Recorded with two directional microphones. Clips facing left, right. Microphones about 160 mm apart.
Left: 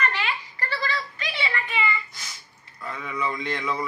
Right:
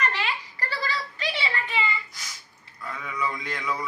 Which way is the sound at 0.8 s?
30° right (ahead or behind).